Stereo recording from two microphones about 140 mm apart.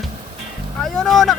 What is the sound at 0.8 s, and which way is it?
Speech, centre (ahead or behind).